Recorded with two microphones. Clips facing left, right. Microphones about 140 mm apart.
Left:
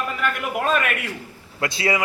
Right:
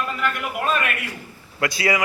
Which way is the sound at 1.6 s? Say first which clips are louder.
Right 1 dB; 25° left (ahead or behind).